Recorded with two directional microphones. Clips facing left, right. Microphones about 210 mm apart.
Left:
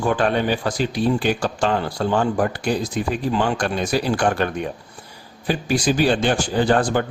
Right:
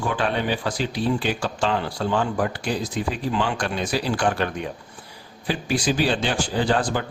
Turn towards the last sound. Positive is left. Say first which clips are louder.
# left 4 dB
turn(degrees=50)  # may be behind; listen again after turning